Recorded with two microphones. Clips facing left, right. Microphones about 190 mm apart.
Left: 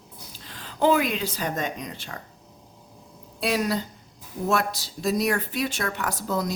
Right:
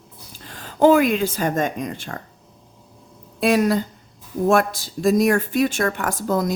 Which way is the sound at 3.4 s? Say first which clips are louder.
Right 7 dB; 50° right (ahead or behind).